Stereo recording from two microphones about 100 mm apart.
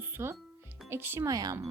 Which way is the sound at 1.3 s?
35° right (ahead or behind).